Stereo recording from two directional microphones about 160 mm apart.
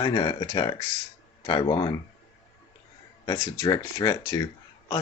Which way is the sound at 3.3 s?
25° left (ahead or behind).